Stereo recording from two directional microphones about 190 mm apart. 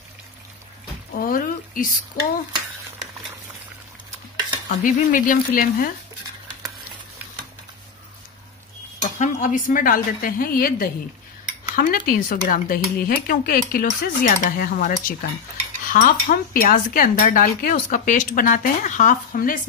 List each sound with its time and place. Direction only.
1.1 s speech: 45° left (ahead or behind)
4.6 s speech: 45° left (ahead or behind)
9.0 s speech: 40° left (ahead or behind)